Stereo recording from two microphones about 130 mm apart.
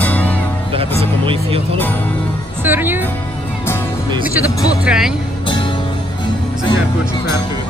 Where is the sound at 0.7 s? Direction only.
50° right (ahead or behind).